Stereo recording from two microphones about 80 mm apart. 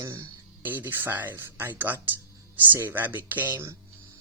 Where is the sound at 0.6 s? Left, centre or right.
Right.